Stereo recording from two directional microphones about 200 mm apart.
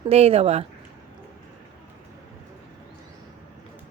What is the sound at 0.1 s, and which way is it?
Speech, 30° right (ahead or behind).